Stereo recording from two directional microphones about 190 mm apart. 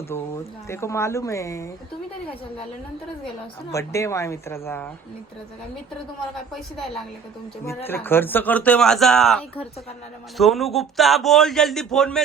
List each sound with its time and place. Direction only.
0.1 s speech: 15° left (ahead or behind)
3.7 s speech: 15° left (ahead or behind)
7.9 s a man's voice: 10° left (ahead or behind)